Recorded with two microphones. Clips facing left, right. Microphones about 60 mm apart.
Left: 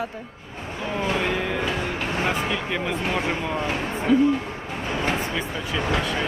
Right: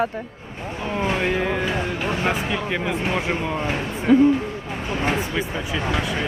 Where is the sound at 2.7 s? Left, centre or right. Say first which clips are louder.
Right 2 dB; centre.